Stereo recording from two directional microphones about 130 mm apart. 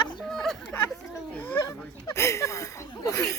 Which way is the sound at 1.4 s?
15° left (ahead or behind).